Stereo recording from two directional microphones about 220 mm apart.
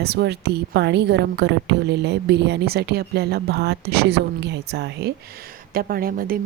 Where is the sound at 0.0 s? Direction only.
50° right (ahead or behind).